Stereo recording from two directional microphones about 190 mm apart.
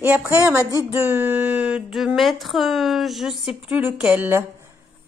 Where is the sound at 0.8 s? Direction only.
10° right (ahead or behind).